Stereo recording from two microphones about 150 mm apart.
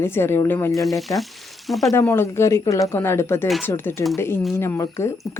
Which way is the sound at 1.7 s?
Centre (ahead or behind).